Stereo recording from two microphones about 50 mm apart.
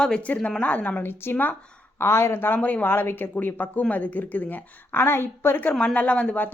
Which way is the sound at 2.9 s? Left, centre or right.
Left.